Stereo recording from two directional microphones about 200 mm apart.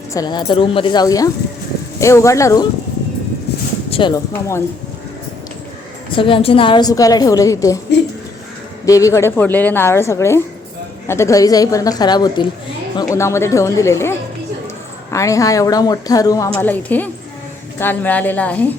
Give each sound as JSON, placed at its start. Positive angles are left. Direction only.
{"t": 0.1, "sound": "a woman's voice", "side_deg": 20}
{"t": 3.8, "sound": "speech", "side_deg": 25}
{"t": 4.3, "sound": "a woman's voice", "side_deg": 15}
{"t": 6.1, "sound": "a woman's voice", "side_deg": 25}
{"t": 8.9, "sound": "a woman's voice", "side_deg": 15}